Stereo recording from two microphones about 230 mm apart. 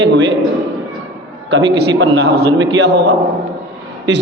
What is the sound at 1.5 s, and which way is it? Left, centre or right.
A man's voice, right.